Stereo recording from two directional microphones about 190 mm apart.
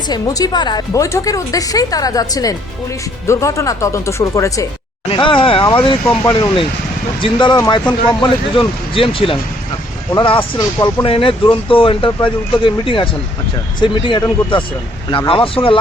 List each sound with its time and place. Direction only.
0.1 s speech: 20° left (ahead or behind)
5.0 s speech: 25° left (ahead or behind)
10.8 s speech: 15° left (ahead or behind)
11.0 s speech: 30° left (ahead or behind)